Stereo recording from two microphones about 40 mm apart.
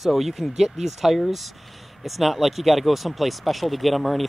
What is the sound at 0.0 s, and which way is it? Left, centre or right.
Speech, centre.